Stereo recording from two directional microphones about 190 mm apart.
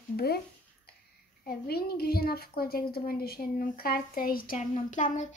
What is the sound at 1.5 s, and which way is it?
A woman's voice, 55° left (ahead or behind).